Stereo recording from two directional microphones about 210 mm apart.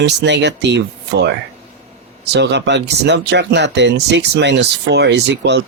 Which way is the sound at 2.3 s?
55° right (ahead or behind).